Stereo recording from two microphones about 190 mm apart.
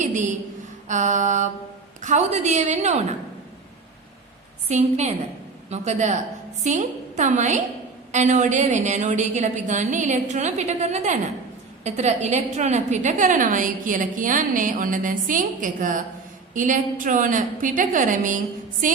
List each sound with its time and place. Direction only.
0.0 s a woman's voice: 40° right (ahead or behind)
4.7 s a woman's voice: 35° right (ahead or behind)